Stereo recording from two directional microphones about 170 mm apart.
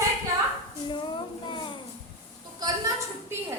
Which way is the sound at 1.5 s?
30° left (ahead or behind).